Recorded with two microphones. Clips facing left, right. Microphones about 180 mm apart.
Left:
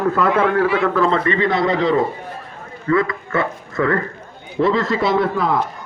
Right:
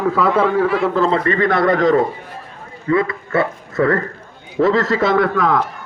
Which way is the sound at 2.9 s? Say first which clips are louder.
Right 1 dB; 30° right (ahead or behind).